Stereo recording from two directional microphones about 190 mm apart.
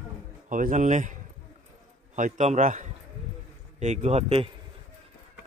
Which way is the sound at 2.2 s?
40° right (ahead or behind).